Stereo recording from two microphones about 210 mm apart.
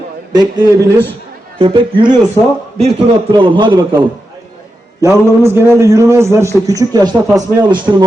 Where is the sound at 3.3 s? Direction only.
20° right (ahead or behind).